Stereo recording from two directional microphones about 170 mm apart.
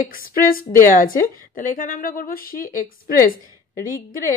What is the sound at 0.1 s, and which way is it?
A woman's voice, 55° left (ahead or behind).